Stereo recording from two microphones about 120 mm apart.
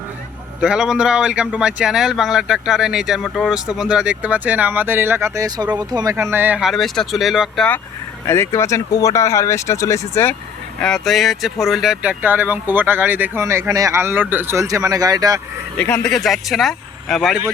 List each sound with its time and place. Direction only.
0.6 s speech: 5° right (ahead or behind); by 6.1 s 30° right (ahead or behind)
6.1 s speech: 20° right (ahead or behind)
6.7 s speech: centre (ahead or behind)
8.3 s speech: 20° left (ahead or behind)
10.8 s speech: 5° left (ahead or behind)
12.2 s speech: 15° right (ahead or behind); by 15.4 s 30° right (ahead or behind)
15.8 s speech: 5° left (ahead or behind)